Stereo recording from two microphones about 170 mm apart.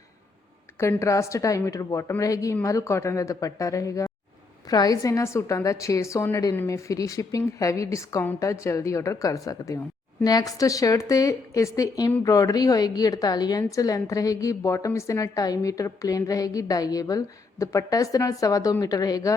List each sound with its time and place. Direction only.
0.8 s a woman's voice: 15° left (ahead or behind)